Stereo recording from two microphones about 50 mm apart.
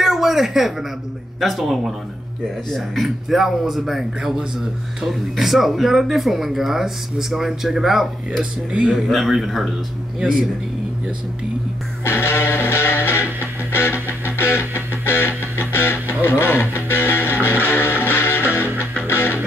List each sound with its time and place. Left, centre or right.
0.0 s speech: centre
12.0 s music: left